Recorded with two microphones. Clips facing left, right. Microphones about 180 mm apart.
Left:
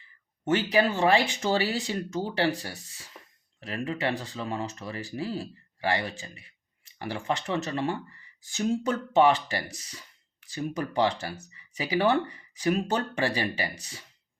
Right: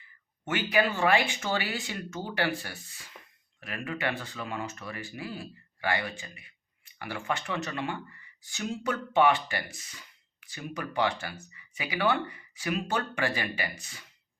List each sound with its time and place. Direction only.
0.4 s speech: 35° left (ahead or behind)